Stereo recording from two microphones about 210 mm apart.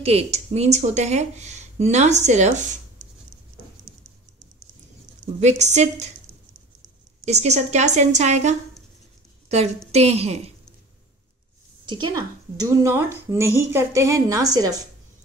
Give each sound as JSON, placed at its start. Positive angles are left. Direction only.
{"t": 0.0, "sound": "speech", "side_deg": -30}
{"t": 5.4, "sound": "speech", "side_deg": -35}
{"t": 7.4, "sound": "speech", "side_deg": -35}
{"t": 9.8, "sound": "a woman's voice", "side_deg": -30}
{"t": 11.8, "sound": "a woman's voice", "side_deg": -20}